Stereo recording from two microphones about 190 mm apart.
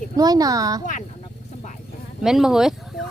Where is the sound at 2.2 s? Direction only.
Centre (ahead or behind).